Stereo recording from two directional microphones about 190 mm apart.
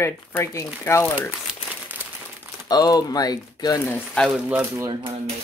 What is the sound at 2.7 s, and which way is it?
Speech, 20° left (ahead or behind).